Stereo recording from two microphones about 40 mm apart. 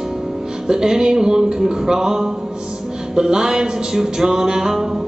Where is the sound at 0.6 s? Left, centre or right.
Centre.